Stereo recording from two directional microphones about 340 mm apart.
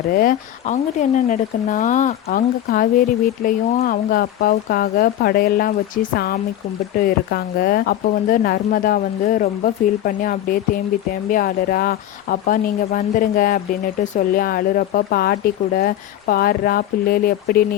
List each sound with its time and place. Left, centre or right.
0.1 s speech: left